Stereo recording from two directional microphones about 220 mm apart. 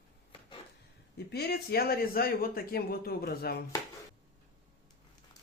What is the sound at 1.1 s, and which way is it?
A man's voice, 45° left (ahead or behind).